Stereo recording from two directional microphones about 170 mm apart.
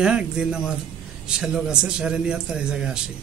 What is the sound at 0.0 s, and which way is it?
A man's voice, 5° right (ahead or behind).